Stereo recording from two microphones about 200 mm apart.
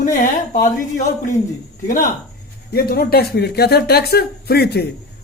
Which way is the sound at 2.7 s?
50° left (ahead or behind).